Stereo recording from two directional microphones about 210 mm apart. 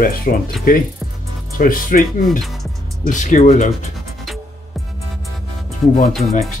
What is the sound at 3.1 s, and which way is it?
Speech, 35° left (ahead or behind).